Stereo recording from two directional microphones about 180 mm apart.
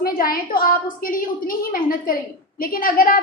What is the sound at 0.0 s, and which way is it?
A woman's voice, 55° left (ahead or behind).